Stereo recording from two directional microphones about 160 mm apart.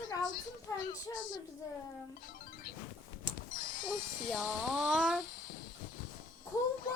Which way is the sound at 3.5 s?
55° left (ahead or behind).